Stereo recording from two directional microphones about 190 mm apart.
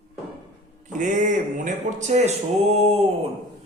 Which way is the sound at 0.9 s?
40° right (ahead or behind).